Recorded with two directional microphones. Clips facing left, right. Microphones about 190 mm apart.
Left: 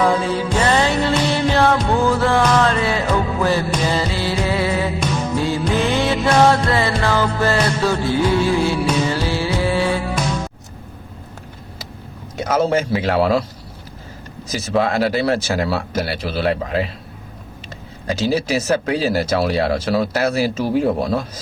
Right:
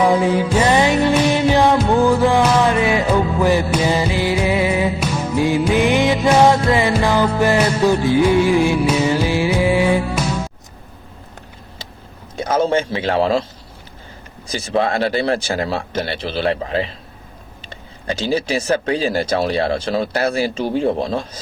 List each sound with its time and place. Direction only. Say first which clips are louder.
0.0 s music: right 3 dB; 15° right (ahead or behind)
12.4 s a man's voice: even; 30° right (ahead or behind)
14.7 s speech: even; centre (ahead or behind)
18.3 s speech: even; 5° left (ahead or behind)